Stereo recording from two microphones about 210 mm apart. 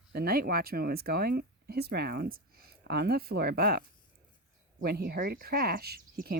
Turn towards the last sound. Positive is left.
turn(degrees=-50)  # may be behind; listen again after turning